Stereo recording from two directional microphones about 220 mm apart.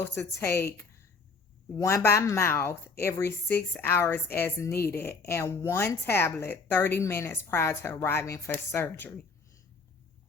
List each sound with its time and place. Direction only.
0.0 s speech: 10° left (ahead or behind)